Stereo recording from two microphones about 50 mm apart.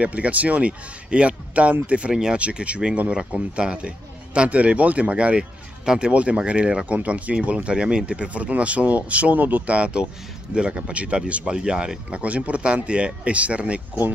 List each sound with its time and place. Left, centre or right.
0.0 s speech: right